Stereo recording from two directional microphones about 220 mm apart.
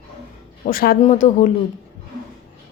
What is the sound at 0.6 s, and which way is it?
Speech, 40° left (ahead or behind).